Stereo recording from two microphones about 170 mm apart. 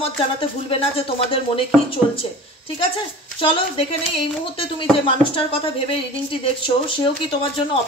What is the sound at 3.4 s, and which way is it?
Speech, 30° left (ahead or behind).